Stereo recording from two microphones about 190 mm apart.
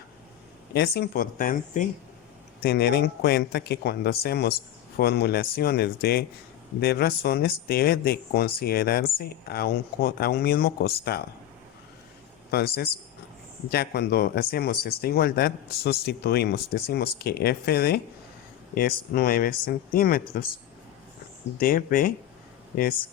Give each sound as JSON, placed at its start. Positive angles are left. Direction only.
{"t": 0.7, "sound": "speech", "side_deg": 60}
{"t": 2.6, "sound": "speech", "side_deg": 55}
{"t": 12.5, "sound": "speech", "side_deg": 55}
{"t": 21.6, "sound": "speech", "side_deg": 50}